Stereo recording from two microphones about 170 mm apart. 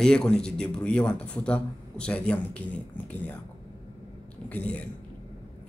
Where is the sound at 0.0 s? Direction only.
5° left (ahead or behind).